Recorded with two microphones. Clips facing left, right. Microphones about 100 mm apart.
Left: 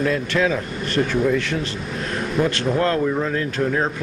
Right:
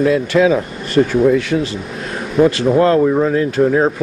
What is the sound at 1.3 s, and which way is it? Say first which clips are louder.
Speech: right 7 dB; 5° right (ahead or behind).